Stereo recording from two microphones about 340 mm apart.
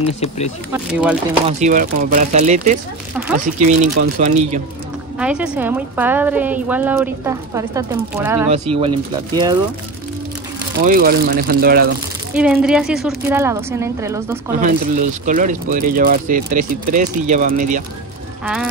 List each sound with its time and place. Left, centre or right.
0.0 s speech: centre
1.6 s speech: right
3.2 s a woman's voice: centre
3.6 s speech: right
5.2 s a woman's voice: centre
10.8 s speech: right
12.4 s a woman's voice: centre
14.6 s speech: right
18.4 s speech: centre